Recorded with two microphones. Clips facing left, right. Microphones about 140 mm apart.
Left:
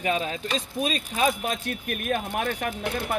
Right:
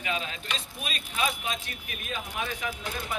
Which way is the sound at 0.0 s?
40° left (ahead or behind).